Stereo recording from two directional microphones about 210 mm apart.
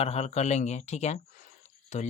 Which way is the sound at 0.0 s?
30° left (ahead or behind).